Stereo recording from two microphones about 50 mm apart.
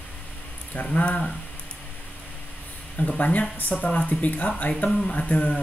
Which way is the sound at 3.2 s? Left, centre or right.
Left.